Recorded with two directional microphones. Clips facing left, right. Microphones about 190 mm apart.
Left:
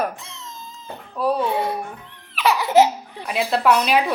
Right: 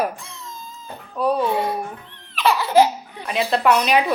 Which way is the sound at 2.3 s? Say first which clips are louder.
Even; 10° left (ahead or behind).